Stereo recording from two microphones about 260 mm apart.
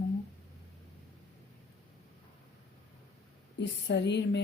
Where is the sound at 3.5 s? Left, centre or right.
Left.